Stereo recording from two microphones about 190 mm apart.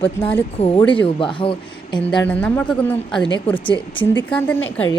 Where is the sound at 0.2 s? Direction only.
10° left (ahead or behind).